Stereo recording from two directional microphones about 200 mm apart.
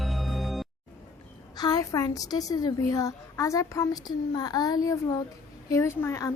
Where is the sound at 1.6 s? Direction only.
20° left (ahead or behind).